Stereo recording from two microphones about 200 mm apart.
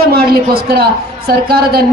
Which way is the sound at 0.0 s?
50° right (ahead or behind).